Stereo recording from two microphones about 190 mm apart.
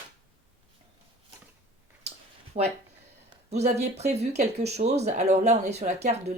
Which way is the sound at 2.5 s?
40° right (ahead or behind).